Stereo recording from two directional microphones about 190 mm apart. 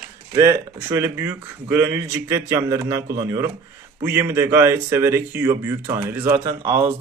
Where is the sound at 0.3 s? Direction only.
15° right (ahead or behind).